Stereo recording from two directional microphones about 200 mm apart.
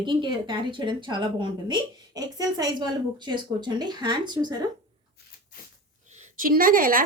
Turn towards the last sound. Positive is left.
turn(degrees=-45)  # may be behind; listen again after turning